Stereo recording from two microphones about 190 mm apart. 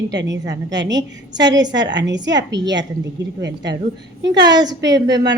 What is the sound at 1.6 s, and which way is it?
A woman's voice, 70° right (ahead or behind).